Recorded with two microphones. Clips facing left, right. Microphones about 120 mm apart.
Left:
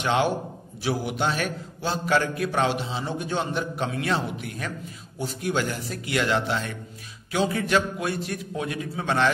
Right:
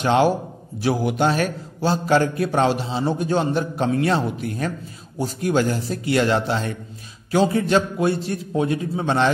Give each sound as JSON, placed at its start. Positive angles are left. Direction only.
{"t": 0.0, "sound": "a man's voice", "side_deg": -35}
{"t": 0.8, "sound": "a man's voice", "side_deg": -45}